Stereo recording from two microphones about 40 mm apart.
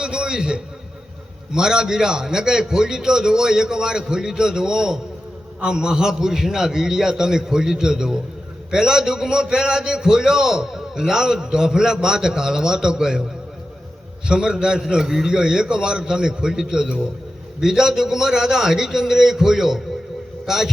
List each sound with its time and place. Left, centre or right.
0.0 s a sound: right
1.5 s a man's voice: centre
14.3 s a man's voice: centre